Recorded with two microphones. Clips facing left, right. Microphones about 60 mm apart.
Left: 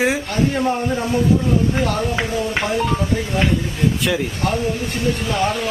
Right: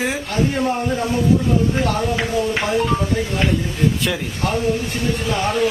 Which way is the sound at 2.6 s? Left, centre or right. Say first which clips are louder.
Right 1 dB; centre.